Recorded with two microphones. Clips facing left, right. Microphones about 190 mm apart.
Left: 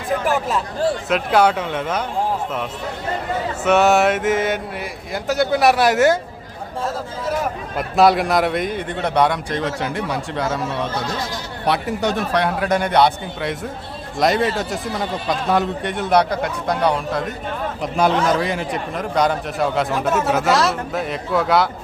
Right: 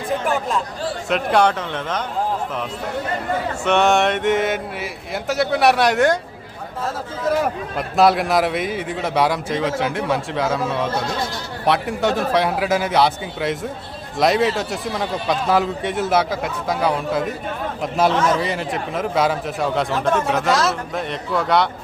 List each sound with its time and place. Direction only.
0.3 s a man's voice: 5° left (ahead or behind)
3.6 s a man's voice: 5° left (ahead or behind)
7.8 s a man's voice: centre (ahead or behind)